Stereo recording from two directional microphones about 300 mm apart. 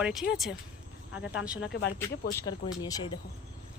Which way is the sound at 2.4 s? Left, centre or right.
Centre.